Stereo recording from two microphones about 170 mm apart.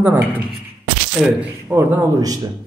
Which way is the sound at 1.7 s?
15° right (ahead or behind).